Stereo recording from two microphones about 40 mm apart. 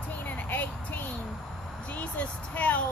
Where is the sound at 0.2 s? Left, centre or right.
Left.